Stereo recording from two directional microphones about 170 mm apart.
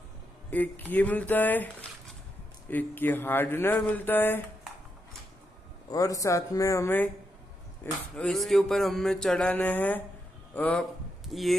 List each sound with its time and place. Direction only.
0.5 s speech: 10° left (ahead or behind)
5.9 s speech: 20° left (ahead or behind)
7.8 s a man's voice: 5° left (ahead or behind)